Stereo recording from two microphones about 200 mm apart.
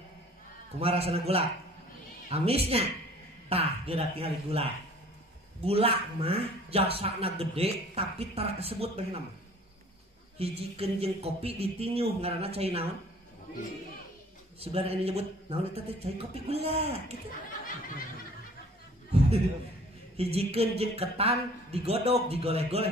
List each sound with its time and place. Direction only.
0.7 s a man's voice: 30° right (ahead or behind)
10.4 s a man's voice: 30° right (ahead or behind)
14.6 s a man's voice: 30° right (ahead or behind)
19.1 s a sound: 30° right (ahead or behind)
20.2 s a man's voice: 30° right (ahead or behind)